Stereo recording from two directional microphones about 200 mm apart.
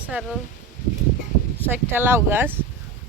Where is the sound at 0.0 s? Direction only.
5° right (ahead or behind).